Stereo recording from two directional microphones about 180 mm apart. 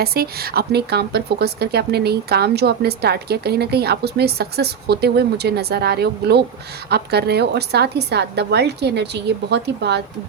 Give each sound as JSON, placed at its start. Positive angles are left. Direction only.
{"t": 0.0, "sound": "a woman's voice", "side_deg": -60}